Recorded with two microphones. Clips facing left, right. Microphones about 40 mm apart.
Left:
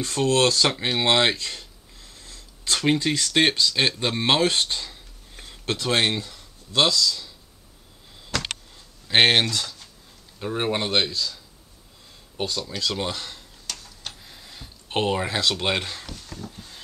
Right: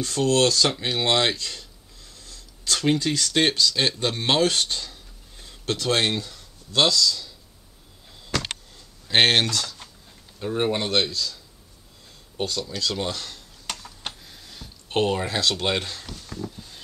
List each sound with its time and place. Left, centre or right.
0.0 s speech: left
8.4 s power windows: centre
10.4 s speech: centre
12.4 s speech: centre
13.7 s a sound: right
14.2 s speech: centre
16.5 s a sound: centre